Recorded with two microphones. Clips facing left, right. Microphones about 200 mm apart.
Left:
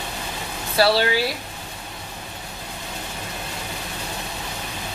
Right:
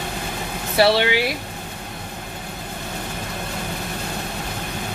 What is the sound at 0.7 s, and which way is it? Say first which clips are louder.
Speech: right 2 dB; 20° right (ahead or behind).